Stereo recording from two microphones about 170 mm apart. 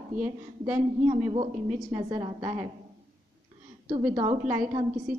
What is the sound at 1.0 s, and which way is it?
A woman's voice, 30° right (ahead or behind).